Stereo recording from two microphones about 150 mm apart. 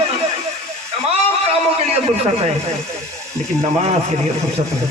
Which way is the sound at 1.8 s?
45° right (ahead or behind).